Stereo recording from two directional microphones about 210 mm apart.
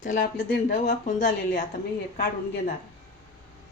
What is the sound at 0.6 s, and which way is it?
Speech, 40° left (ahead or behind).